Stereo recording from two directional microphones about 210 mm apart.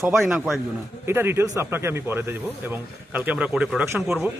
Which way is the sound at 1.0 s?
10° right (ahead or behind).